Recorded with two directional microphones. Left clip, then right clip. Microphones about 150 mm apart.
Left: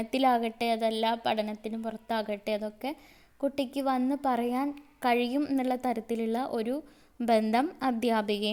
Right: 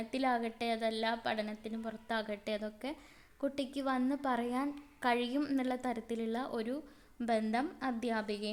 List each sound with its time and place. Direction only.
0.0 s a woman's voice: 40° left (ahead or behind)